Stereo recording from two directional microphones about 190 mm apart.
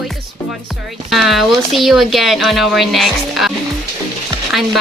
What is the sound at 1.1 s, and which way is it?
Speech, centre (ahead or behind).